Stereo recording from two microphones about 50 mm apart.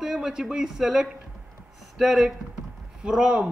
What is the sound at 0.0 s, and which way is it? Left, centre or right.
A man's voice, centre.